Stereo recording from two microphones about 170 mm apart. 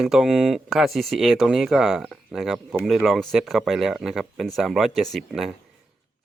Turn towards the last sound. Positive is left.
turn(degrees=0)  # may be behind; listen again after turning